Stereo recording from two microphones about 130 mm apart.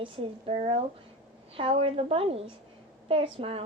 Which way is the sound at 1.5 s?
45° right (ahead or behind).